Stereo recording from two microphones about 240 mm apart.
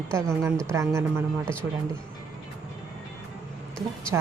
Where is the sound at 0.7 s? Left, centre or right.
Centre.